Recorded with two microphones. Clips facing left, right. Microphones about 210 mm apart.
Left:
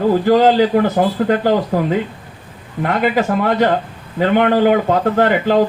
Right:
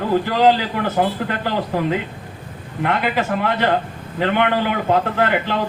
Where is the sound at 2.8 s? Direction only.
40° left (ahead or behind).